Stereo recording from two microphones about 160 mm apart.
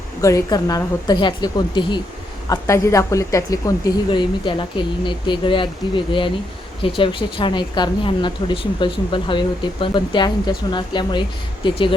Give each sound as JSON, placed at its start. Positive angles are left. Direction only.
{"t": 0.2, "sound": "a woman's voice", "side_deg": 20}
{"t": 2.5, "sound": "a woman's voice", "side_deg": 20}